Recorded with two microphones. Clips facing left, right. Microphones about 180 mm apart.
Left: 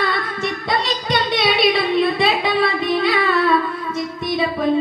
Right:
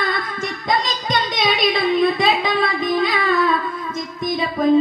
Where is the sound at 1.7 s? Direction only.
45° right (ahead or behind).